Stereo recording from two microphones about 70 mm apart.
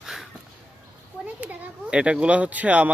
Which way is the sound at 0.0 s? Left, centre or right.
Centre.